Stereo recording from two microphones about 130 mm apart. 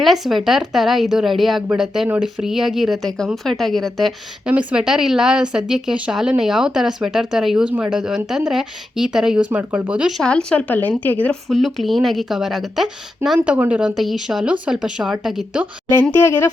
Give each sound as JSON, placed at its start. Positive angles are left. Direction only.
{"t": 0.0, "sound": "speech", "side_deg": 0}
{"t": 11.4, "sound": "speech", "side_deg": 0}
{"t": 16.1, "sound": "speech", "side_deg": 20}